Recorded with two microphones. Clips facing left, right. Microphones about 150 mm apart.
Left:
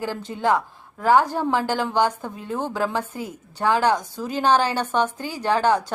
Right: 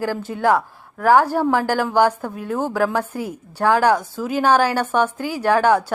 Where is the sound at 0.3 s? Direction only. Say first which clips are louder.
Right 4 dB; 75° right (ahead or behind).